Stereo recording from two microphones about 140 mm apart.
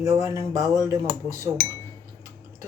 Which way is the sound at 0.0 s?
25° right (ahead or behind).